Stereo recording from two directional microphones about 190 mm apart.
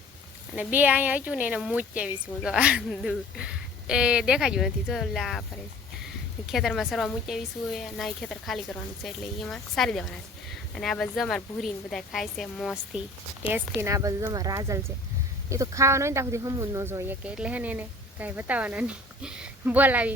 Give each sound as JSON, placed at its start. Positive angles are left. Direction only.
{"t": 0.5, "sound": "speech", "side_deg": -10}
{"t": 13.5, "sound": "speech", "side_deg": -15}